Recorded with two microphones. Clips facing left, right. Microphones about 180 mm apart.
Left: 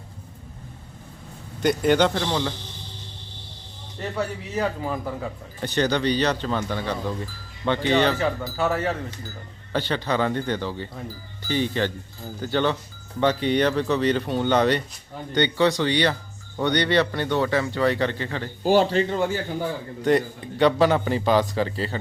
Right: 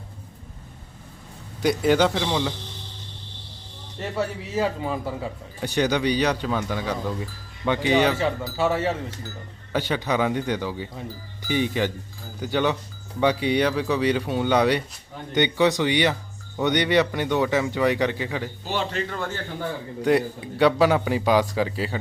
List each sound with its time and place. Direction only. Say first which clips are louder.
1.6 s a man's voice: even; centre (ahead or behind)
4.8 s a man's voice: even; 5° right (ahead or behind)
18.6 s speech: left 12 dB; 40° left (ahead or behind); by 19.3 s 25° left (ahead or behind)
20.0 s a man's voice: even; 10° right (ahead or behind)